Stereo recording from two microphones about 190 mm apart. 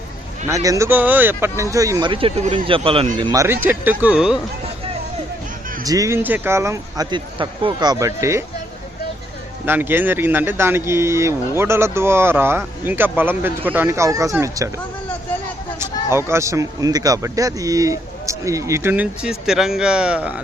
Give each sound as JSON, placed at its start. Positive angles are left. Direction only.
{"t": 0.4, "sound": "a man's voice", "side_deg": -15}
{"t": 3.2, "sound": "speech", "side_deg": -15}
{"t": 5.8, "sound": "speech", "side_deg": -20}
{"t": 9.6, "sound": "speech", "side_deg": -10}
{"t": 16.0, "sound": "speech", "side_deg": -15}